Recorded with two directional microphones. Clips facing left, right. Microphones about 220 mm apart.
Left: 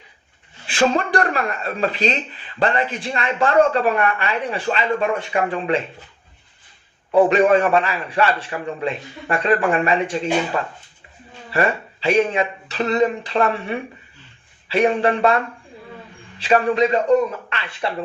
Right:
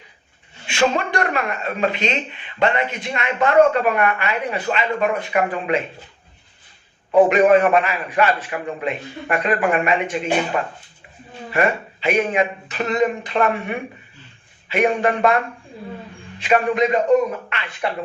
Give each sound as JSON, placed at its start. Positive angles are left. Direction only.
{"t": 0.7, "sound": "speech", "side_deg": 35}
{"t": 7.1, "sound": "speech", "side_deg": 30}
{"t": 11.5, "sound": "speech", "side_deg": 30}
{"t": 16.4, "sound": "speech", "side_deg": 30}